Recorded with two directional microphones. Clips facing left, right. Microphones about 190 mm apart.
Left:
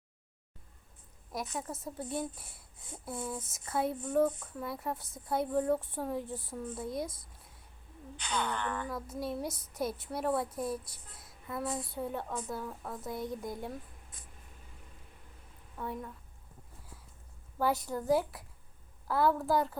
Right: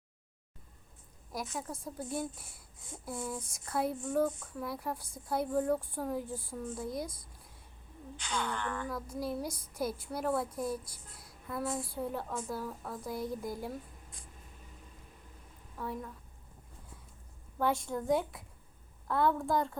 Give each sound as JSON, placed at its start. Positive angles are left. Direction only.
{"t": 1.3, "sound": "a woman's voice", "side_deg": 0}
{"t": 8.2, "sound": "a woman's voice", "side_deg": 20}
{"t": 8.9, "sound": "a woman's voice", "side_deg": 0}
{"t": 9.5, "sound": "a woman's voice", "side_deg": 25}
{"t": 9.8, "sound": "a woman's voice", "side_deg": 0}
{"t": 10.8, "sound": "speech", "side_deg": 25}
{"t": 11.4, "sound": "a woman's voice", "side_deg": 0}
{"t": 15.8, "sound": "a woman's voice", "side_deg": 0}
{"t": 17.6, "sound": "a woman's voice", "side_deg": 5}